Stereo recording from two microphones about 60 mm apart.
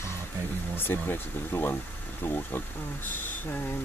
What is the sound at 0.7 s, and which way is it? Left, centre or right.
Speech, left.